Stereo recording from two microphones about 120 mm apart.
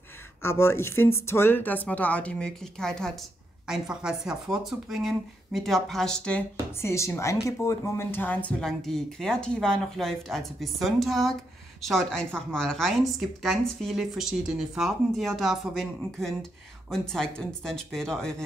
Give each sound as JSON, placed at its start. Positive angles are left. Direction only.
{"t": 0.4, "sound": "speech", "side_deg": 20}
{"t": 6.8, "sound": "speech", "side_deg": 25}